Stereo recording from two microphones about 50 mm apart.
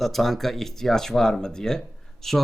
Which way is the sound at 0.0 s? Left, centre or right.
Centre.